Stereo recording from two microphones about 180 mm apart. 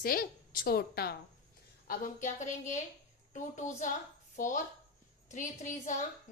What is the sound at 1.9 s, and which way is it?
A woman's voice, 45° left (ahead or behind).